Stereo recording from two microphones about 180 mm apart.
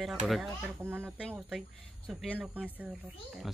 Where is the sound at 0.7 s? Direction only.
10° right (ahead or behind).